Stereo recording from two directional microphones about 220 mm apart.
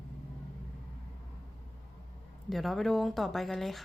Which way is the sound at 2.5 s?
Centre (ahead or behind).